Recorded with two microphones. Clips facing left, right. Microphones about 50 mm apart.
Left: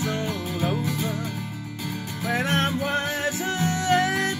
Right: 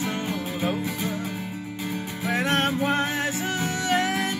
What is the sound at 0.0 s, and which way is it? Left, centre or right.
Music, centre.